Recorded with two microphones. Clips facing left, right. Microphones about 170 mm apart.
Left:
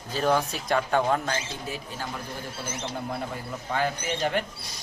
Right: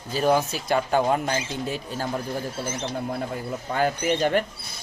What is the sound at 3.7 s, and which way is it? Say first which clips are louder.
Speech: right 5 dB; 40° right (ahead or behind).